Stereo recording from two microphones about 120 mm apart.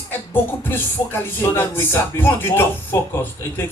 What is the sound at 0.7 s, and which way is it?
Music, 20° left (ahead or behind).